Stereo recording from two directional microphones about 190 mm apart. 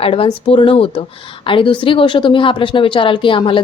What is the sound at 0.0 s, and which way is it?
Speech, 30° left (ahead or behind).